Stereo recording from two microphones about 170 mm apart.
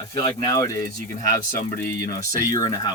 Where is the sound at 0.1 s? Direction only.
25° left (ahead or behind).